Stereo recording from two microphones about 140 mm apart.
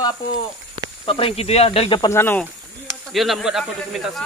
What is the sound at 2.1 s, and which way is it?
Speech, 15° left (ahead or behind).